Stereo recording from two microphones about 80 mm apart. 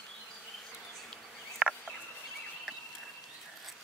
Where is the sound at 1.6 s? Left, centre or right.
Centre.